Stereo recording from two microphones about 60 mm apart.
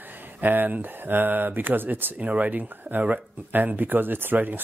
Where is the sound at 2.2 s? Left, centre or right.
Right.